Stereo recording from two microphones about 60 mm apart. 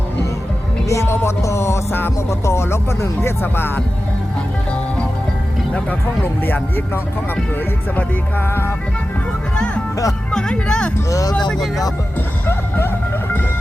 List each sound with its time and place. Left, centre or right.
0.9 s music: left
1.9 s music: left
6.4 s music: left
10.3 s speech: centre
11.1 s speech: left
11.3 s speech: centre
12.5 s music: left